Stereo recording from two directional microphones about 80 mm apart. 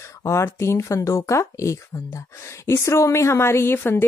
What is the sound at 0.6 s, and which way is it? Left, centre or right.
Speech, left.